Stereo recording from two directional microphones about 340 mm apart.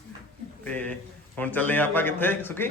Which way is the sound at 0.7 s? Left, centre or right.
Centre.